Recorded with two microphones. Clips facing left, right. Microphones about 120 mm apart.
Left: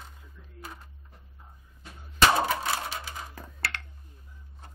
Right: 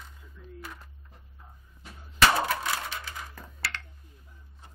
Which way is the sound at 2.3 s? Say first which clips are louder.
Left 3 dB; 15° left (ahead or behind).